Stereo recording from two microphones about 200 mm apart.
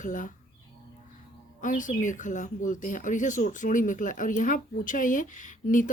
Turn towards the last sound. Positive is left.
turn(degrees=40)  # may be behind; listen again after turning